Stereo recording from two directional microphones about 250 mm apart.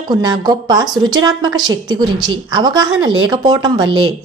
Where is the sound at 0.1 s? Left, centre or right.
Centre.